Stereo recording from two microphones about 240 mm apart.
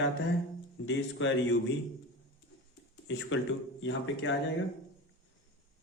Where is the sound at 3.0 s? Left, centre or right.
Left.